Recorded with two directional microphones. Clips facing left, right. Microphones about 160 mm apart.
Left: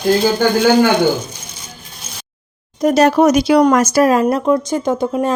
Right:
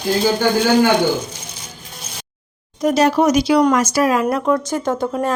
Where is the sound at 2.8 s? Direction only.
50° left (ahead or behind).